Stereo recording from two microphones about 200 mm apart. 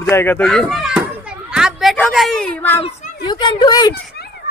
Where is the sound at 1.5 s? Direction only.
5° right (ahead or behind).